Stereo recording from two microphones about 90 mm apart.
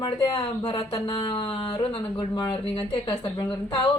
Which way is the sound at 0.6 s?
75° left (ahead or behind).